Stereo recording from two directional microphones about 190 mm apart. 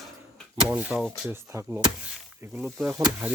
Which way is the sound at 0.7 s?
5° right (ahead or behind).